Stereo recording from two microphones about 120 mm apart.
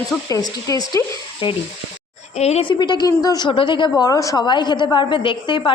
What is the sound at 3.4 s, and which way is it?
A woman's voice, 45° left (ahead or behind).